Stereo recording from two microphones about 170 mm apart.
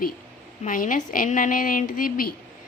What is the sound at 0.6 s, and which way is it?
A woman's voice, 55° left (ahead or behind).